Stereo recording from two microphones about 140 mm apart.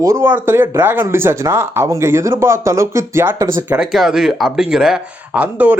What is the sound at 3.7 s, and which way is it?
Speech, 5° right (ahead or behind).